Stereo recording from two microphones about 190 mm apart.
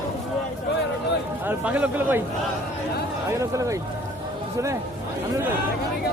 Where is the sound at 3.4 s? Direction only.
15° right (ahead or behind).